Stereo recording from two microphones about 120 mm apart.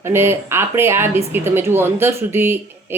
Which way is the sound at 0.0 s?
20° right (ahead or behind).